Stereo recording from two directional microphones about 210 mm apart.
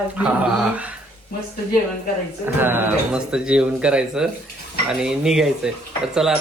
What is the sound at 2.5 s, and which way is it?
Speech, 10° right (ahead or behind).